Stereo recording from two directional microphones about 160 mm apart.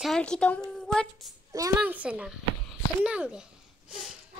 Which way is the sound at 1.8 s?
10° right (ahead or behind).